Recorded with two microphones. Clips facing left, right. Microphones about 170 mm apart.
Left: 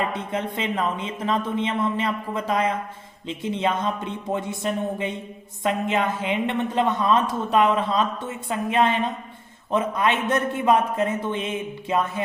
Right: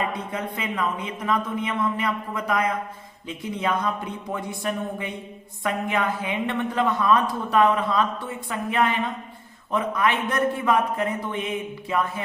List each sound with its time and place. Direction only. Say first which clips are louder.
0.1 s speech: left 2 dB; 25° left (ahead or behind)